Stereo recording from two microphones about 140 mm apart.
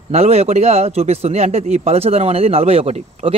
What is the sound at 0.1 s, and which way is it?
A man's voice, 50° right (ahead or behind).